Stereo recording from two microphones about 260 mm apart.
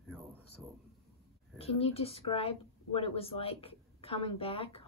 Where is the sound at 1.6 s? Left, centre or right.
Left.